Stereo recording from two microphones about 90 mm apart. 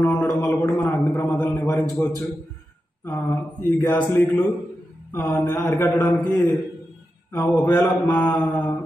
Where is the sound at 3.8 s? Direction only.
15° left (ahead or behind).